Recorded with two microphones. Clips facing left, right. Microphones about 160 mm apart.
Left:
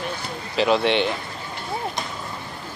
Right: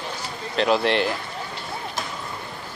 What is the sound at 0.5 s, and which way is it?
Speech, centre (ahead or behind).